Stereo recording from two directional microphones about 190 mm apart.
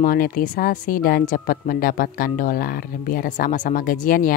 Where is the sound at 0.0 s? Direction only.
50° left (ahead or behind).